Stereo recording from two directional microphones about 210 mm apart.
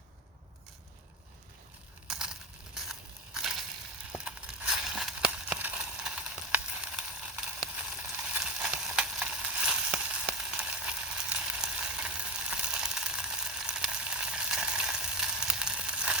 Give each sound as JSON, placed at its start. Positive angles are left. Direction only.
{"t": 2.0, "sound": "crushing", "side_deg": -5}
{"t": 4.1, "sound": "a sound", "side_deg": -5}
{"t": 8.1, "sound": "sizzle", "side_deg": -5}